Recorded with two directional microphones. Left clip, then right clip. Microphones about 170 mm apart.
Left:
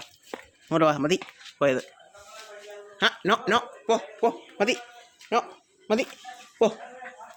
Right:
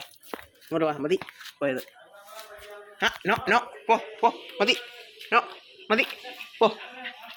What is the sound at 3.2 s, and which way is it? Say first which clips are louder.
Speech: even; 30° left (ahead or behind).